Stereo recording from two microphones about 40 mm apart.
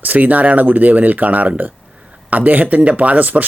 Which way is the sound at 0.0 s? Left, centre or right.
Right.